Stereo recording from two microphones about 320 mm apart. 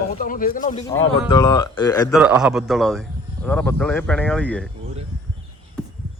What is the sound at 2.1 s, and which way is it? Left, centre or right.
Speech, centre.